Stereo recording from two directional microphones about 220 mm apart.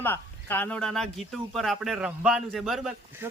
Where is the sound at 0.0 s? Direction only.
10° left (ahead or behind).